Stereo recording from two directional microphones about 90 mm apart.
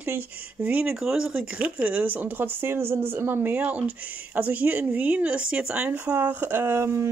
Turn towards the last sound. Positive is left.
turn(degrees=-30)  # may be behind; listen again after turning